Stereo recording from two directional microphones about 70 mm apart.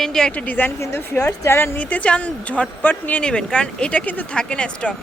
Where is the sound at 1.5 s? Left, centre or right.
Left.